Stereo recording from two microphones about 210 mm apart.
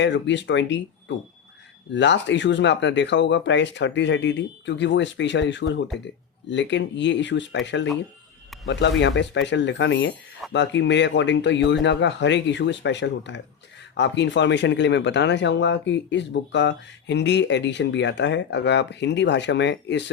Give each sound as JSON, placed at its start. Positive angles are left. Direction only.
{"t": 0.0, "sound": "speech", "side_deg": 60}